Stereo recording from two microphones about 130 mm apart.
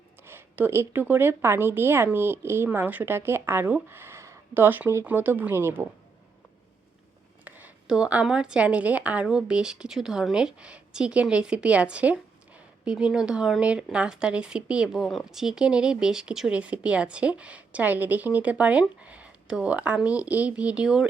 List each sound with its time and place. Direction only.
0.3 s a woman's voice: 15° right (ahead or behind)
7.4 s a woman's voice: 15° right (ahead or behind)